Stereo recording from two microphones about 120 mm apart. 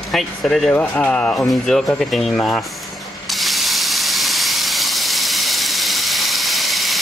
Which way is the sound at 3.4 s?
Centre (ahead or behind).